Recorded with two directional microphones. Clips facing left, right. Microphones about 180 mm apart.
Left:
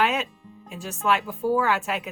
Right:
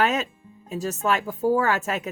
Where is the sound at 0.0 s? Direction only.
40° right (ahead or behind).